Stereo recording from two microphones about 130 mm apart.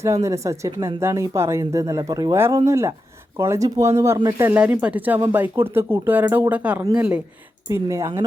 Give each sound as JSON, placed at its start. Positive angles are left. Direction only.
{"t": 0.0, "sound": "speech", "side_deg": -25}
{"t": 7.7, "sound": "speech", "side_deg": -25}